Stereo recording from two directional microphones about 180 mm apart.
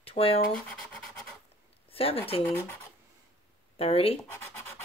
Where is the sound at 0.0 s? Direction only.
30° left (ahead or behind).